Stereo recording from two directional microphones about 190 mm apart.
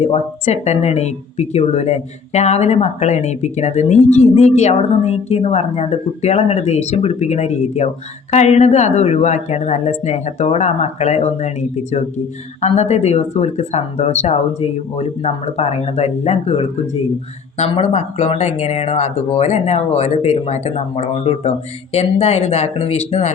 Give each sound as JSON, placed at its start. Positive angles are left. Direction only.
{"t": 0.0, "sound": "speech", "side_deg": 35}